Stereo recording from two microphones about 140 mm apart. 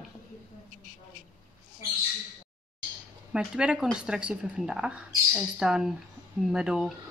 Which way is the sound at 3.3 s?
5° right (ahead or behind).